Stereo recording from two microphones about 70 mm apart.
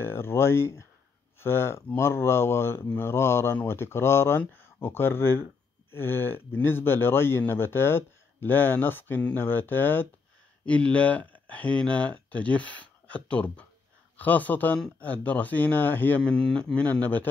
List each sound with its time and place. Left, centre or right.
0.0 s speech: left
10.6 s speech: centre
16.3 s speech: centre
16.7 s speech: left